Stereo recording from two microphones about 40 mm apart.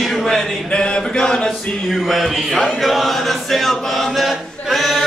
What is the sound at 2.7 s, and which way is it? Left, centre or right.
Chant, centre.